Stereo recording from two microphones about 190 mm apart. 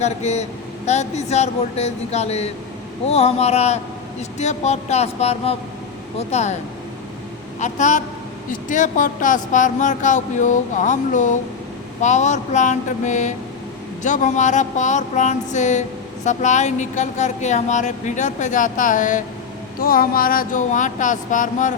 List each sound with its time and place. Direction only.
0.0 s speech: 35° left (ahead or behind)
7.6 s speech: 40° left (ahead or behind)
19.8 s a sound: 50° left (ahead or behind)